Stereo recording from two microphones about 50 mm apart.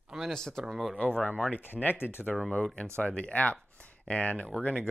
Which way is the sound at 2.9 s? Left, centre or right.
Left.